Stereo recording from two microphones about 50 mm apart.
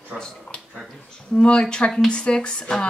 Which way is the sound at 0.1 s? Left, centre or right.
Centre.